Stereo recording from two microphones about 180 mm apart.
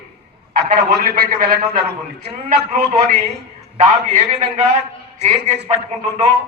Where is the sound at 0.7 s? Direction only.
55° right (ahead or behind); by 6.3 s 40° right (ahead or behind).